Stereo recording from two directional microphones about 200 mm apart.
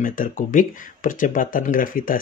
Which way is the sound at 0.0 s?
40° left (ahead or behind).